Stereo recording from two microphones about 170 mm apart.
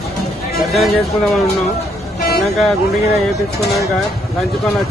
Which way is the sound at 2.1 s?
65° left (ahead or behind).